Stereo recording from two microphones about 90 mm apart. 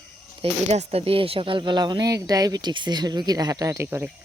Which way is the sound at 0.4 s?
90° right.